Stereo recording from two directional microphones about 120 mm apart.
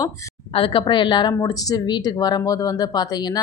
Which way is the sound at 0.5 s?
45° left (ahead or behind).